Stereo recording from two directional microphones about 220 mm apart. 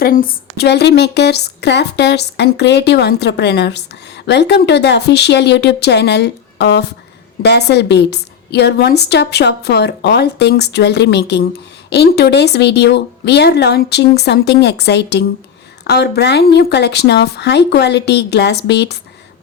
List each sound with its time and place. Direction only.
0.0 s a woman's voice: 40° left (ahead or behind)